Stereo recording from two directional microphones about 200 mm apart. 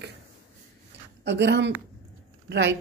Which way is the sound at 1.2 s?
60° right (ahead or behind).